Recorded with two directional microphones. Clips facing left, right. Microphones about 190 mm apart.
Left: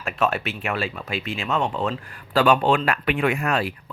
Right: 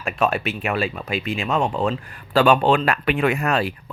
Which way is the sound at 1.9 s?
30° right (ahead or behind).